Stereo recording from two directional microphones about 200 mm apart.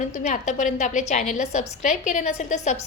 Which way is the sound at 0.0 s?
35° left (ahead or behind).